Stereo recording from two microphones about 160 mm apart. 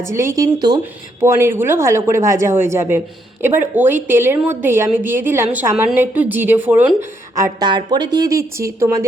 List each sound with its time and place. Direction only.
0.0 s a woman's voice: 20° right (ahead or behind)